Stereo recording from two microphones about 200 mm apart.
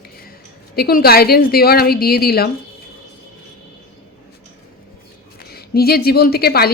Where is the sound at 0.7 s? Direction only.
50° left (ahead or behind).